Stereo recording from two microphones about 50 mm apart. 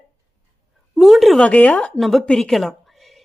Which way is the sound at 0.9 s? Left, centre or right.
Centre.